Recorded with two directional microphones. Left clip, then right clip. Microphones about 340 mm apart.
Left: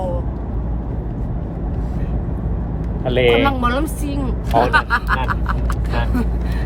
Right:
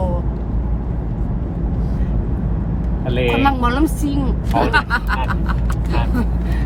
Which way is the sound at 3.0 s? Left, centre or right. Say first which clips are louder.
Left 5 dB; left.